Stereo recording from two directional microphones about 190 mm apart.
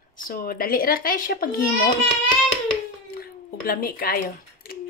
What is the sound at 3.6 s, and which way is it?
Speech, 50° left (ahead or behind).